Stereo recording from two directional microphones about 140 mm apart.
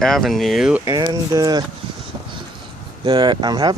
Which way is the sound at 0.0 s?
Centre (ahead or behind).